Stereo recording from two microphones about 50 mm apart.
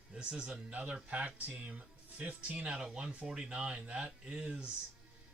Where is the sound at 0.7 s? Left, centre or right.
Right.